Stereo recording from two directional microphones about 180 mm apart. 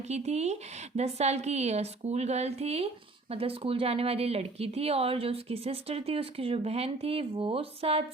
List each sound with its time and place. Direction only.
0.1 s speech: 35° right (ahead or behind)